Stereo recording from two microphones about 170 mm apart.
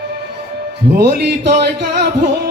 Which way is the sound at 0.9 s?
70° right (ahead or behind).